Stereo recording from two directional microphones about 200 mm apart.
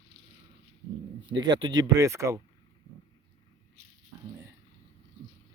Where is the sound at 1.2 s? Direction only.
25° right (ahead or behind).